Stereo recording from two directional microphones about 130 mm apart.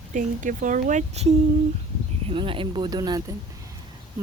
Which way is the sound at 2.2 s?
40° right (ahead or behind).